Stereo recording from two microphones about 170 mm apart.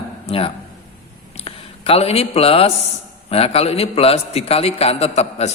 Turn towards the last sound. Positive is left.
turn(degrees=40)  # may be behind; listen again after turning